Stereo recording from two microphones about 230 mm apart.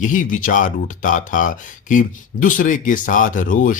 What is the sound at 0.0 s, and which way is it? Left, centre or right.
Speech, left.